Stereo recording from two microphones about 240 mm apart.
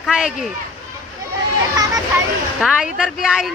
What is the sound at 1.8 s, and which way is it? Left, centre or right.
Children playing, centre.